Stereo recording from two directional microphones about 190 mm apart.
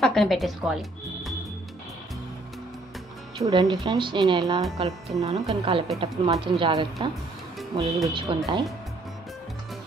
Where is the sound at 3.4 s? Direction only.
20° right (ahead or behind).